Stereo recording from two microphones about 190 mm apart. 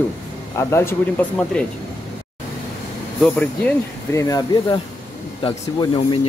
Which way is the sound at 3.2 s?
10° left (ahead or behind).